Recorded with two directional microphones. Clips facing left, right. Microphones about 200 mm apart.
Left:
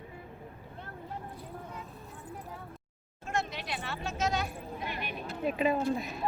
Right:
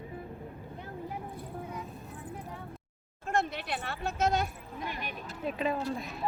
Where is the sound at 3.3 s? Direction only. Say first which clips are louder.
Right 3 dB; 55° right (ahead or behind).